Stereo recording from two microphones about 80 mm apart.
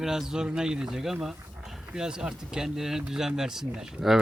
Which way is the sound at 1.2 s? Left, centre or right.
Centre.